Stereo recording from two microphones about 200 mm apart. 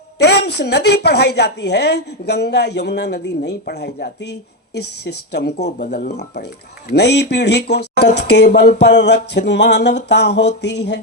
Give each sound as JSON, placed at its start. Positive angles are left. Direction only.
{"t": 0.2, "sound": "a woman's voice", "side_deg": 55}